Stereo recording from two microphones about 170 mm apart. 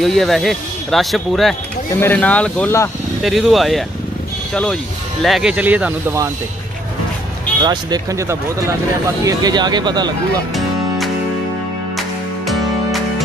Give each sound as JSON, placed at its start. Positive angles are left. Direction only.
{"t": 0.0, "sound": "speech", "side_deg": 0}
{"t": 3.2, "sound": "speech", "side_deg": 0}
{"t": 5.2, "sound": "speech", "side_deg": 0}
{"t": 7.6, "sound": "speech", "side_deg": -25}
{"t": 12.0, "sound": "music", "side_deg": 0}